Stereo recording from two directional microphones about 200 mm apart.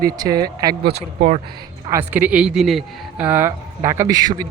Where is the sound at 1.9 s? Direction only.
10° right (ahead or behind).